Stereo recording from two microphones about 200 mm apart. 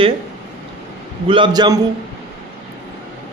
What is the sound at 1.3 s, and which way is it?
Speech, 25° right (ahead or behind).